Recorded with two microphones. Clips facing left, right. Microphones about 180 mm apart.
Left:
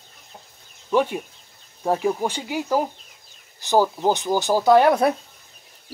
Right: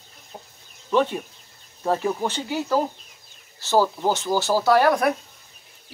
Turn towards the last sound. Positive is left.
turn(degrees=20)  # may be behind; listen again after turning